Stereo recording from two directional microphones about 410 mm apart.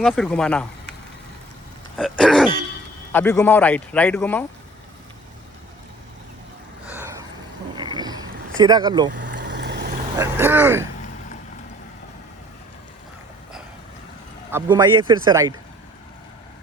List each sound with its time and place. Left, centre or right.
0.0 s speech: centre
2.0 s speech: centre
7.8 s a sound: centre
9.2 s vehicle: right
10.2 s speech: centre
14.5 s speech: centre